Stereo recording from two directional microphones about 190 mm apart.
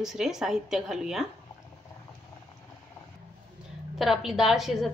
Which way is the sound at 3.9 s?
Centre (ahead or behind).